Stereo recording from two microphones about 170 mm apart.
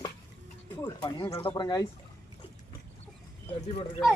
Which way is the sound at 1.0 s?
20° left (ahead or behind).